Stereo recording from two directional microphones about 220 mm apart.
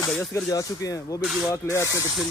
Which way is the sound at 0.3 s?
15° left (ahead or behind).